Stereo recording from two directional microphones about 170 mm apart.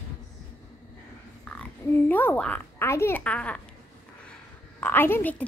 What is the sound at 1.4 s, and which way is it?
A child's voice, 10° left (ahead or behind).